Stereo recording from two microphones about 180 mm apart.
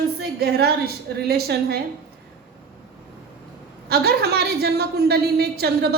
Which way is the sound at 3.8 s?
60° right (ahead or behind).